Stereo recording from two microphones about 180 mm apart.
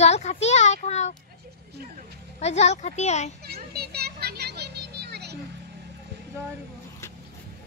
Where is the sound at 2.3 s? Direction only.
35° left (ahead or behind).